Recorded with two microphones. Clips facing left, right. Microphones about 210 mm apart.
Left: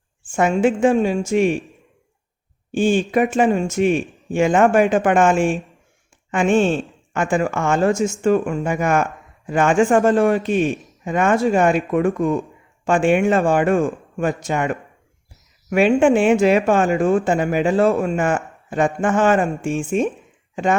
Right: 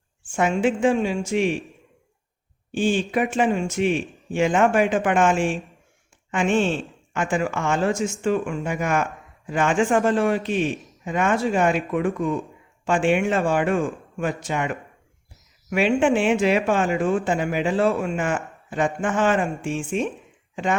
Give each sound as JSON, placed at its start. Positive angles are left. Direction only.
{"t": 0.3, "sound": "speech", "side_deg": 45}
{"t": 2.7, "sound": "speech", "side_deg": 45}